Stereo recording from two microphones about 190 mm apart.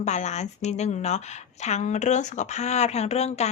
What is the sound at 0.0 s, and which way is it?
Speech, 35° left (ahead or behind).